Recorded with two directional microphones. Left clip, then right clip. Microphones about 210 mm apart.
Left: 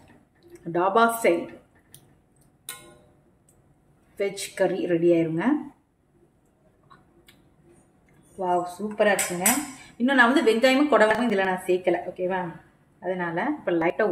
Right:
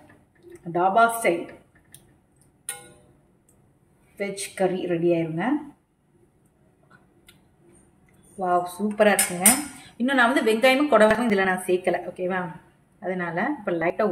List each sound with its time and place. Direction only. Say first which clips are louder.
0.5 s speech: right 1 dB; 20° left (ahead or behind)
4.2 s a woman's voice: left 1 dB; 25° left (ahead or behind)
8.4 s a woman's voice: right 2 dB; centre (ahead or behind)